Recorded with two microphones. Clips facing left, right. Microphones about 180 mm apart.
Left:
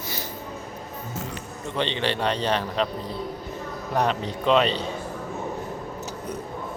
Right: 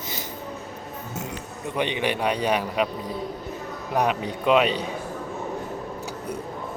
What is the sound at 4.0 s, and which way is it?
Speech, 10° right (ahead or behind).